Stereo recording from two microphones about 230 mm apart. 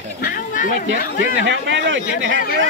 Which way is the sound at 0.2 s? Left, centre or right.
Left.